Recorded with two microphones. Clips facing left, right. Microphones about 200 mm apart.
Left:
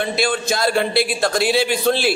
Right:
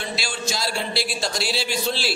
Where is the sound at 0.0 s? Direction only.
55° left (ahead or behind).